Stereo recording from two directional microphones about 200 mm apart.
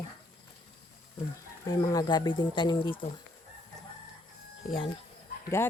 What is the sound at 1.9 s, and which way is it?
Speech, 20° left (ahead or behind).